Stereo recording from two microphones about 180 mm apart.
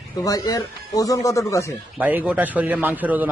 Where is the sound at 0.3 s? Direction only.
20° left (ahead or behind).